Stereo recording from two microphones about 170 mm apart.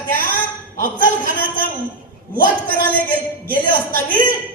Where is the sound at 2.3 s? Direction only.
60° right (ahead or behind).